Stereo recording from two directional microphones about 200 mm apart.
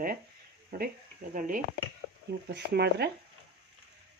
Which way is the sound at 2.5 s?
55° right (ahead or behind).